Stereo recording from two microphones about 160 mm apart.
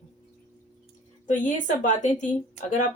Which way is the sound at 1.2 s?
50° left (ahead or behind).